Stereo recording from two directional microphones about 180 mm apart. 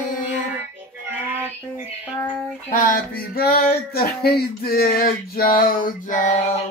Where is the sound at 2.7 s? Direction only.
50° left (ahead or behind).